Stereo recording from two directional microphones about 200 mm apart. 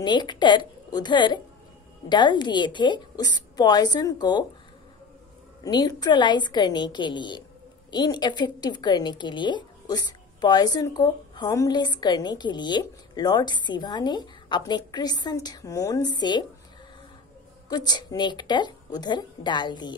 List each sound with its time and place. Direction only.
0.0 s a woman's voice: 20° left (ahead or behind)
5.6 s a woman's voice: 20° left (ahead or behind)
17.6 s a woman's voice: 20° left (ahead or behind)